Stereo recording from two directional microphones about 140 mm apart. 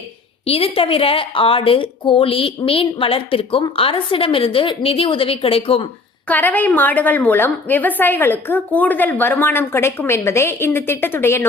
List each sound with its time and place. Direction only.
0.4 s a woman's voice: 45° left (ahead or behind)
6.2 s a woman's voice: 10° left (ahead or behind)